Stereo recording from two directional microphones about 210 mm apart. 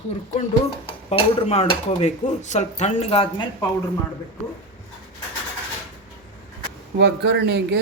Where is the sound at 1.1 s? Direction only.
30° left (ahead or behind).